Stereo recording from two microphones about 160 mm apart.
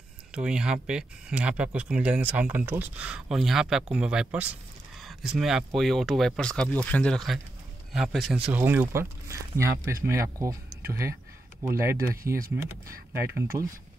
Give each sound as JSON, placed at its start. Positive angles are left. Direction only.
{"t": 0.3, "sound": "speech", "side_deg": -5}